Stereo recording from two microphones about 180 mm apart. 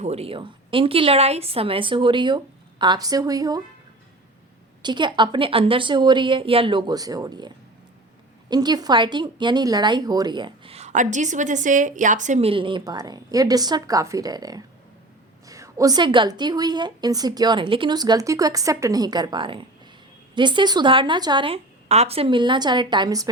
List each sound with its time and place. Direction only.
0.0 s a woman's voice: 35° right (ahead or behind)
4.8 s a woman's voice: 25° right (ahead or behind)